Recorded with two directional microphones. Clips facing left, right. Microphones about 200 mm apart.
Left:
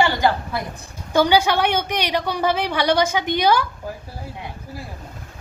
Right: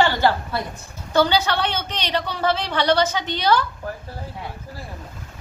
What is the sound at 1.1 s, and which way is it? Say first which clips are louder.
A woman's voice: left 2 dB; 10° left (ahead or behind).